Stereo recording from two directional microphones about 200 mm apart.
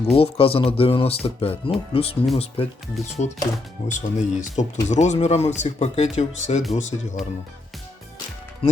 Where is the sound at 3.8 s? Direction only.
40° left (ahead or behind).